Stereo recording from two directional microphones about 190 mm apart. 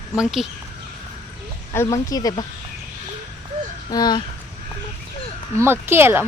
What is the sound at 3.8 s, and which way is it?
Speech, 20° left (ahead or behind).